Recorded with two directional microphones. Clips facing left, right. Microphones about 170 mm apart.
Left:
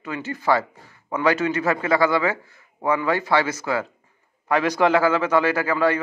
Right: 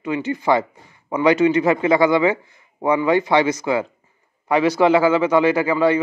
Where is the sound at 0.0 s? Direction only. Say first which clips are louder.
Right 5 dB; 15° right (ahead or behind).